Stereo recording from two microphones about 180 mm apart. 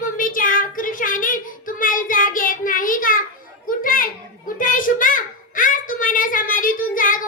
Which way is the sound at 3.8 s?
50° left (ahead or behind).